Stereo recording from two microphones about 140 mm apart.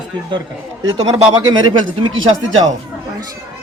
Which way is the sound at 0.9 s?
30° right (ahead or behind).